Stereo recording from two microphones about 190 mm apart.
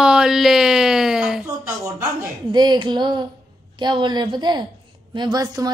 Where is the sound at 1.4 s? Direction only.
15° right (ahead or behind).